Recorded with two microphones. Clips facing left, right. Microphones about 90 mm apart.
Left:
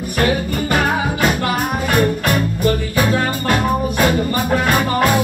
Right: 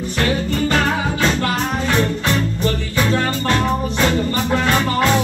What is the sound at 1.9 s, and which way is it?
Music, 10° left (ahead or behind).